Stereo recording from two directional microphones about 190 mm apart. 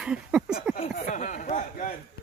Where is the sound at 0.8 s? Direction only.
40° left (ahead or behind).